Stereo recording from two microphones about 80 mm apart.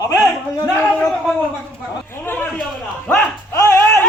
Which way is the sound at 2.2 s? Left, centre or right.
Left.